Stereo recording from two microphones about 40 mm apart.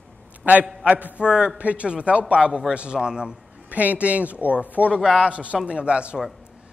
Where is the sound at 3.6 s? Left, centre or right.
Right.